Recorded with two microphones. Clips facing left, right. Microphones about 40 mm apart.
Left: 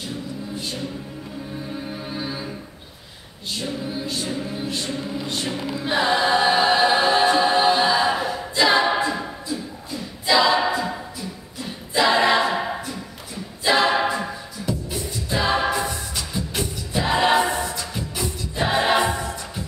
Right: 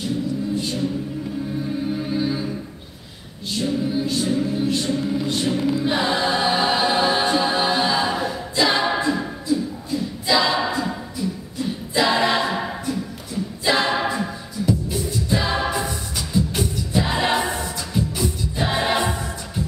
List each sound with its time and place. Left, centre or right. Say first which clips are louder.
1.9 s music: right 7 dB; centre
3.6 s music: right 7 dB; centre
13.8 s a capella: left 1 dB; centre